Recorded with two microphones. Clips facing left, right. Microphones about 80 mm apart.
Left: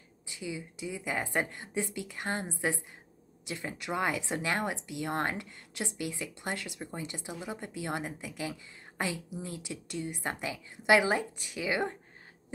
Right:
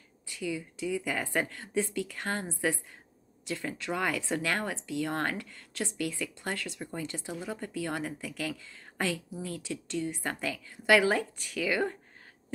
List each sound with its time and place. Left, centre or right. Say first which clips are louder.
0.3 s speech: right 4 dB; centre